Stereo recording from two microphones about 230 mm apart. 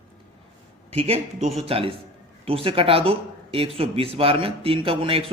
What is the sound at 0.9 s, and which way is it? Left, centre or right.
Speech, right.